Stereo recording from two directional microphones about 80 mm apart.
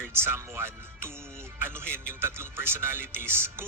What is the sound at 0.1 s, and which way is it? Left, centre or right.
Speech, right.